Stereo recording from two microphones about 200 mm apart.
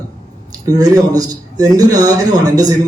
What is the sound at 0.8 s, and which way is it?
A man's voice, 20° right (ahead or behind).